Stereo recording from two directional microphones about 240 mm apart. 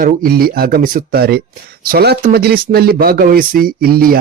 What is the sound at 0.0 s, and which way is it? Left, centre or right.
Speech, right.